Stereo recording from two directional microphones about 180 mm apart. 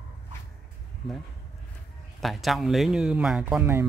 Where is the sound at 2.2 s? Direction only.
Centre (ahead or behind).